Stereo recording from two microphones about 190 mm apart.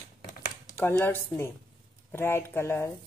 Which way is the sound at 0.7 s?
15° left (ahead or behind).